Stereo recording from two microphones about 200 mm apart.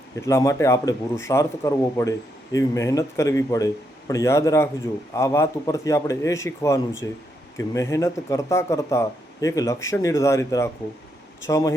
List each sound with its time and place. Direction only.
0.2 s speech: 15° left (ahead or behind)